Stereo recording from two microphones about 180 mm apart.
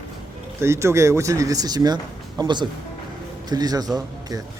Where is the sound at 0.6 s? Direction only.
15° right (ahead or behind).